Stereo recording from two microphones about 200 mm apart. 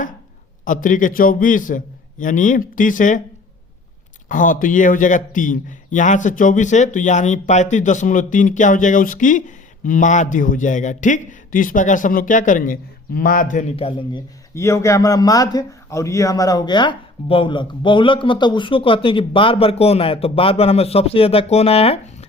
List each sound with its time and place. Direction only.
0.6 s a man's voice: 40° left (ahead or behind)
4.3 s a man's voice: 40° left (ahead or behind)
14.5 s speech: 15° left (ahead or behind)